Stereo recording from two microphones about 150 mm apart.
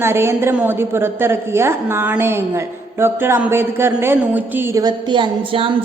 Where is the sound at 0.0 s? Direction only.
15° right (ahead or behind).